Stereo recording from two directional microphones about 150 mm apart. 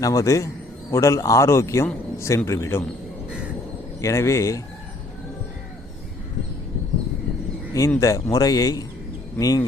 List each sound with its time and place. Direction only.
0.0 s a man's voice: 20° left (ahead or behind)
4.0 s a man's voice: 20° left (ahead or behind)
7.7 s a man's voice: 20° left (ahead or behind)